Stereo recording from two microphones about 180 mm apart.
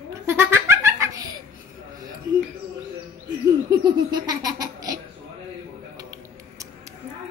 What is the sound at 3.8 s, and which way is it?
Baby laughter, 20° right (ahead or behind).